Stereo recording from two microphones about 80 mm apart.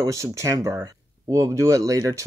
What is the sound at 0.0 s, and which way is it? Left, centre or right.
Speech, right.